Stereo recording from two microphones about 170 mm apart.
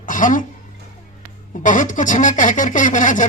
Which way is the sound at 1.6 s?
50° left (ahead or behind).